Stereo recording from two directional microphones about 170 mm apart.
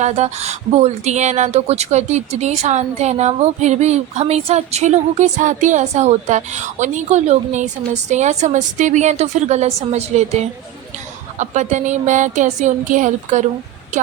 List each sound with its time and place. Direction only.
0.0 s speech: 40° right (ahead or behind)